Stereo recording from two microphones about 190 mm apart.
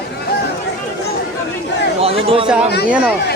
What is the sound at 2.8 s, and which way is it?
Speech, 5° right (ahead or behind).